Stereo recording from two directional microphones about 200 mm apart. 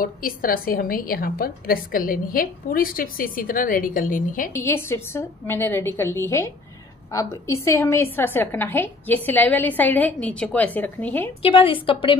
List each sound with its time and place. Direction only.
0.0 s a woman's voice: 45° left (ahead or behind)
4.6 s a woman's voice: 10° left (ahead or behind)
11.4 s a woman's voice: 25° left (ahead or behind)